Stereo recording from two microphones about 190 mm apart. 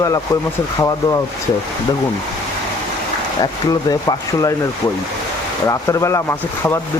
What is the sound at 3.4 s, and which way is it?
Speech, 20° left (ahead or behind).